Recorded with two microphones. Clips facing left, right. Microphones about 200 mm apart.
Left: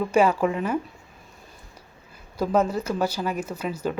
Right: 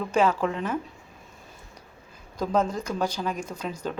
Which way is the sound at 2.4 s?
5° left (ahead or behind).